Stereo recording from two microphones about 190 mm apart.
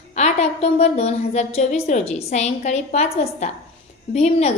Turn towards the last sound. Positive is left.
turn(degrees=35)  # may be behind; listen again after turning